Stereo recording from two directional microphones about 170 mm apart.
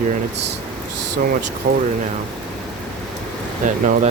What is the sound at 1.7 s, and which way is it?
Speech, 55° right (ahead or behind).